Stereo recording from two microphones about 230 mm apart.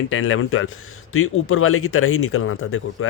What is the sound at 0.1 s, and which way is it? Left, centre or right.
Speech, left.